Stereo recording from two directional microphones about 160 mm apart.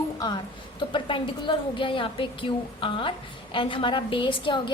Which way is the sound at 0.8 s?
30° left (ahead or behind).